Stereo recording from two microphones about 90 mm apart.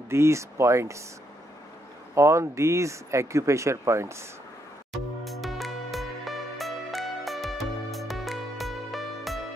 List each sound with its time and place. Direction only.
0.1 s speech: 30° right (ahead or behind)
2.1 s speech: 35° right (ahead or behind)
4.9 s music: centre (ahead or behind)